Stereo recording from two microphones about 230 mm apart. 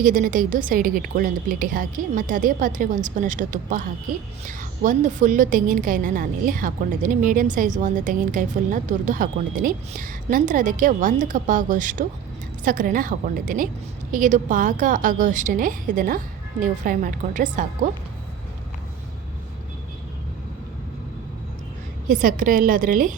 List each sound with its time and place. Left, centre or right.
0.0 s a woman's voice: right
22.1 s a woman's voice: right